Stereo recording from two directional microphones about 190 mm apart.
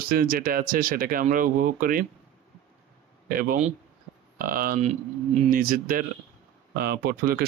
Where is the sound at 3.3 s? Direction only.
50° right (ahead or behind).